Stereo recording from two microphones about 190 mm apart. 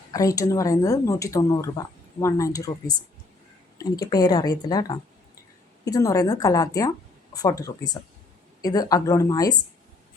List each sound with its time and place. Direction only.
0.1 s speech: 15° left (ahead or behind)
3.8 s speech: 20° left (ahead or behind)